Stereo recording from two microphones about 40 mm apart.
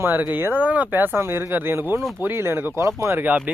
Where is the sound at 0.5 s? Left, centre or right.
Right.